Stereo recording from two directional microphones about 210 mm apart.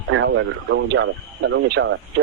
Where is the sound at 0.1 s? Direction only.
65° right (ahead or behind).